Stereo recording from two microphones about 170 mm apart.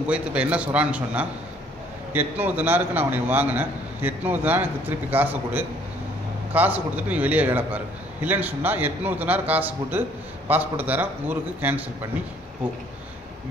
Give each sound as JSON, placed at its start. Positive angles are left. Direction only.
{"t": 0.0, "sound": "a man's voice", "side_deg": -5}